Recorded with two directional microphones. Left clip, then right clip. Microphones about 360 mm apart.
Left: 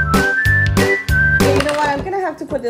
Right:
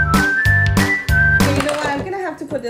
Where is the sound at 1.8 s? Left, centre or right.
Centre.